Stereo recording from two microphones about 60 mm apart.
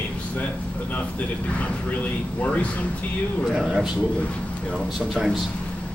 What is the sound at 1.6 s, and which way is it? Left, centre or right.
Speech, left.